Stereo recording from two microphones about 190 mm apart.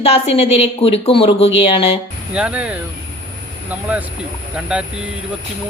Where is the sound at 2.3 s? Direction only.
5° right (ahead or behind).